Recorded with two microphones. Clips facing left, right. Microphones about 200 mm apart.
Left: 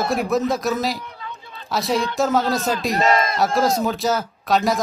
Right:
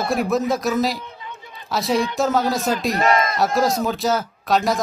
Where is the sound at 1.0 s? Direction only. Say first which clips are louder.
Left 1 dB; 20° right (ahead or behind).